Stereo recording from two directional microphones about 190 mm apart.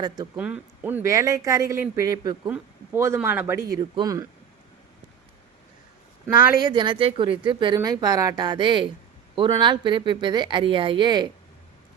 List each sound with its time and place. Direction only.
0.3 s speech: 5° right (ahead or behind)
6.6 s speech: 25° right (ahead or behind)